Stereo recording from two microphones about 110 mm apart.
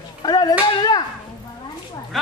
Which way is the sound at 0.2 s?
40° left (ahead or behind).